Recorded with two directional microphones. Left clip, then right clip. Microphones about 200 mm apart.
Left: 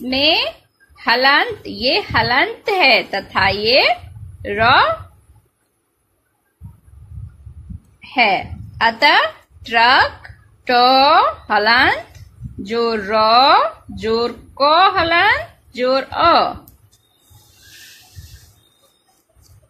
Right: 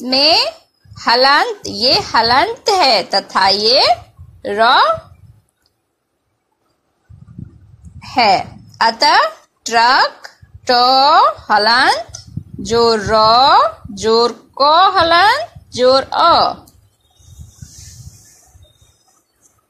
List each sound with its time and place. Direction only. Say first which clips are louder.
0.0 s a woman's voice: right 3 dB; 20° right (ahead or behind)
8.0 s a woman's voice: right 3 dB; 20° right (ahead or behind)